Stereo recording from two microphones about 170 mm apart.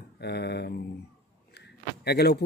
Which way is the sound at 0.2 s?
80° left.